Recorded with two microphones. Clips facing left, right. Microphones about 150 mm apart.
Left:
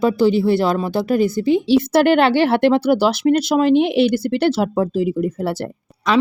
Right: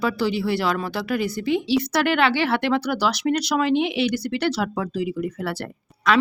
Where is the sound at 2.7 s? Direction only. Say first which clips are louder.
Left 7 dB; 25° left (ahead or behind).